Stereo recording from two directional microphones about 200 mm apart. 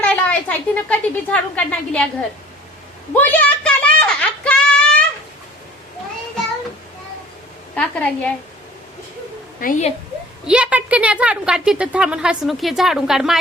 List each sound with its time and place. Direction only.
0.0 s a woman's voice: 5° left (ahead or behind)
3.1 s a sound: 10° left (ahead or behind)
7.8 s a woman's voice: 5° left (ahead or behind)
9.6 s a woman's voice: 45° left (ahead or behind)
10.4 s a woman's voice: 5° right (ahead or behind)